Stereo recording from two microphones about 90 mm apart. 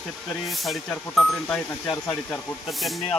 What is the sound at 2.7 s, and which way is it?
Speech, centre (ahead or behind).